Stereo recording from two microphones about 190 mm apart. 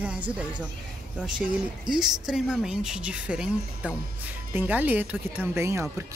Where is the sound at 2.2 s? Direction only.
5° right (ahead or behind).